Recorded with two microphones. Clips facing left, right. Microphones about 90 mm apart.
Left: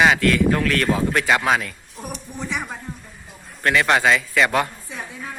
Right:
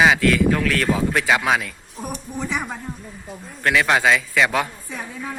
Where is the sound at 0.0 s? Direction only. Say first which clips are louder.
Even; centre (ahead or behind).